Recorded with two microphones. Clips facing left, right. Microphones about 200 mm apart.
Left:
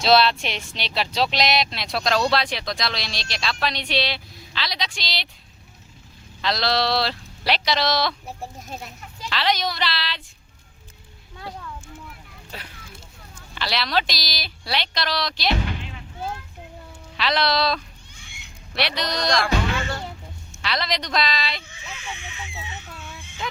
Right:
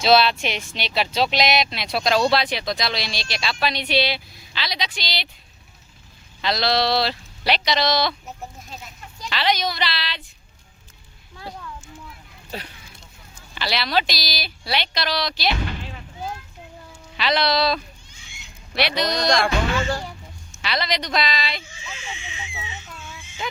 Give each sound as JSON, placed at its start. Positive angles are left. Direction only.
{"t": 0.0, "sound": "speech", "side_deg": 0}
{"t": 6.4, "sound": "speech", "side_deg": 0}
{"t": 8.3, "sound": "a sound", "side_deg": 35}
{"t": 9.3, "sound": "speech", "side_deg": 0}
{"t": 13.6, "sound": "speech", "side_deg": -5}
{"t": 17.2, "sound": "speech", "side_deg": 0}
{"t": 18.1, "sound": "a sound", "side_deg": 60}
{"t": 18.7, "sound": "speech", "side_deg": 0}
{"t": 20.6, "sound": "speech", "side_deg": 0}
{"t": 21.7, "sound": "a sound", "side_deg": 55}